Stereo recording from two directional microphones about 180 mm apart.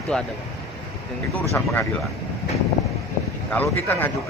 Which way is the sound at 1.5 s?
15° left (ahead or behind).